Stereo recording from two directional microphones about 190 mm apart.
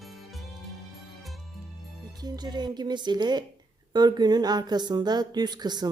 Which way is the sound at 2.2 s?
20° right (ahead or behind).